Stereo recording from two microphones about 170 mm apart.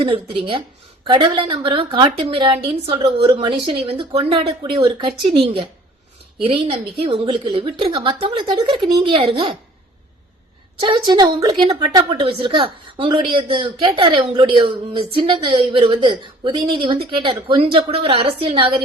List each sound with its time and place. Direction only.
0.0 s a woman's voice: 30° right (ahead or behind)
6.4 s a woman's voice: 35° right (ahead or behind)
10.8 s a woman's voice: 25° right (ahead or behind)